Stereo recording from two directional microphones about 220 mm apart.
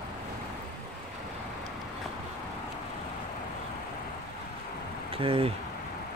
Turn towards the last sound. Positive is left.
turn(degrees=-25)  # may be behind; listen again after turning